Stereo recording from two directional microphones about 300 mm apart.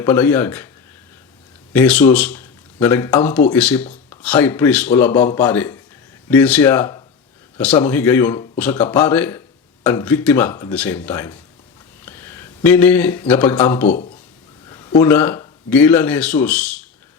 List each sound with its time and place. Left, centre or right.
0.0 s speech: centre
1.7 s speech: centre
13.8 s speech: left; by 16.8 s centre